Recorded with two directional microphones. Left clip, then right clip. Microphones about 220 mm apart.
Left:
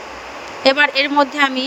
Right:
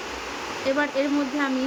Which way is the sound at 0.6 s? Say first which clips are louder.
Left 10 dB; 45° left (ahead or behind).